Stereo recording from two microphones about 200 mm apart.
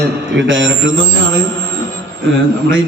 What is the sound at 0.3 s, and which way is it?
Speech, 70° right (ahead or behind).